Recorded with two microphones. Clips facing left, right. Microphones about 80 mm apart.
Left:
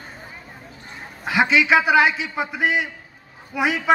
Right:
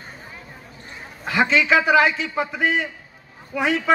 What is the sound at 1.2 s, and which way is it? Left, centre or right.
A man's voice, centre.